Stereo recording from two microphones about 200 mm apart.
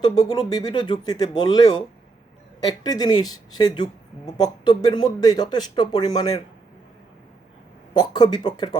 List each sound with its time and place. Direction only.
0.0 s speech: 20° left (ahead or behind)
7.9 s speech: 20° left (ahead or behind)